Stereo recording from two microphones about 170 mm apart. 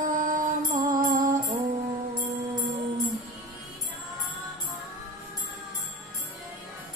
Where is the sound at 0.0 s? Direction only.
50° right (ahead or behind).